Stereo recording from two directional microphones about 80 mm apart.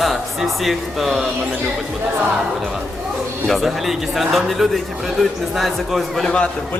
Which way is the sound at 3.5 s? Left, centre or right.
Centre.